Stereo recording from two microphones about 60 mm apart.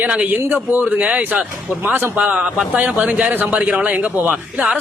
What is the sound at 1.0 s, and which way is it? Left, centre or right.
Speech, right.